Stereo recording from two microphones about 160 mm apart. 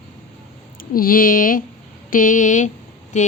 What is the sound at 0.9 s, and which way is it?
A woman's voice, 60° left (ahead or behind).